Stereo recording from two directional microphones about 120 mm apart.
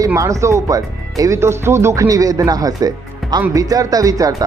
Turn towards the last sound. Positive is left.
turn(degrees=-30)  # may be behind; listen again after turning